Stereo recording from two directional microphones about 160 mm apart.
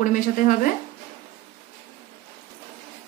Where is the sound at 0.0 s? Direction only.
55° left (ahead or behind).